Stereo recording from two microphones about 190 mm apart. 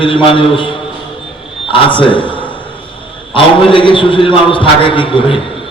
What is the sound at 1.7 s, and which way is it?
Speech, 25° left (ahead or behind).